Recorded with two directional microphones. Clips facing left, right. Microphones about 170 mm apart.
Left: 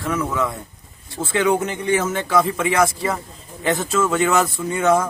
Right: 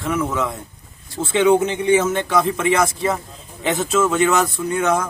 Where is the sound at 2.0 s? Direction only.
5° left (ahead or behind).